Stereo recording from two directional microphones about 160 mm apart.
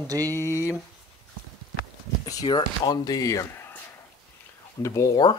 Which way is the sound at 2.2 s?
25° left (ahead or behind).